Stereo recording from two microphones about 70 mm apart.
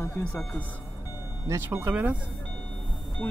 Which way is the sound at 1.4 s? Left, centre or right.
Right.